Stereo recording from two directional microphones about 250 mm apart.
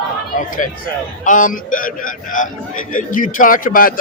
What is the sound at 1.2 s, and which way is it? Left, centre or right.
A man's voice, left.